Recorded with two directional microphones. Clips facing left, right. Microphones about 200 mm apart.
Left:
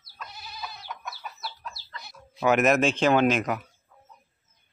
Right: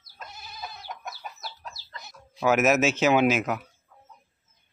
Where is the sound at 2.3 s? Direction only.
5° right (ahead or behind).